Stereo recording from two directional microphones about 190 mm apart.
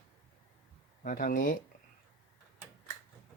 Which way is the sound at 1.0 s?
45° left (ahead or behind).